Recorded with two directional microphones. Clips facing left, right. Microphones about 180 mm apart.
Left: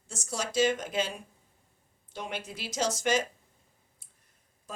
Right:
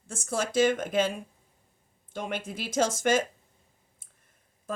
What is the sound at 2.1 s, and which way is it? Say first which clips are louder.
Speech: right 4 dB; 50° right (ahead or behind).